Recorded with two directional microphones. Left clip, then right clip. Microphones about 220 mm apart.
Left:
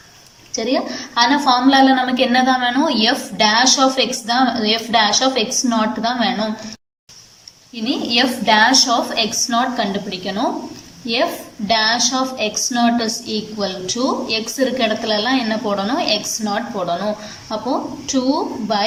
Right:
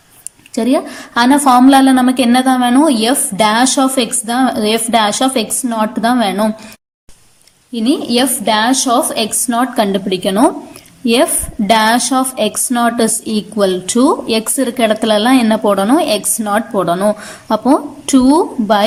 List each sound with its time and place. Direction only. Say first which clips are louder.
0.5 s a woman's voice: right 4 dB; 30° right (ahead or behind)
7.7 s a woman's voice: right 5 dB; 30° right (ahead or behind)